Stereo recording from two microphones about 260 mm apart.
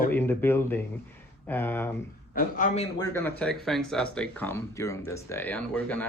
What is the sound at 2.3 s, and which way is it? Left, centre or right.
Speech, left.